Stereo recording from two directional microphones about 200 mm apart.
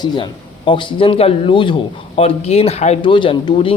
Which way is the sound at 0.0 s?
25° left (ahead or behind).